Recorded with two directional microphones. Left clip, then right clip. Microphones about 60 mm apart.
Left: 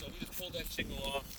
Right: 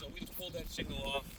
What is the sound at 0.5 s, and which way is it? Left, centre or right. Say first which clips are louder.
Speech: left 3 dB; centre.